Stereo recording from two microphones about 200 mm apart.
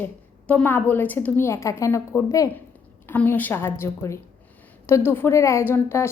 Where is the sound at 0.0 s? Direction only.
5° left (ahead or behind).